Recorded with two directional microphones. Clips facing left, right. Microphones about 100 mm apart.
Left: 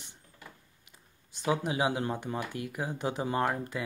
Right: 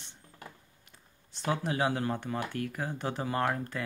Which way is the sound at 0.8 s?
15° left (ahead or behind).